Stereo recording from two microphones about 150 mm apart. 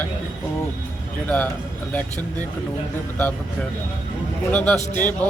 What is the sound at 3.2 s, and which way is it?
A man's voice, 10° left (ahead or behind).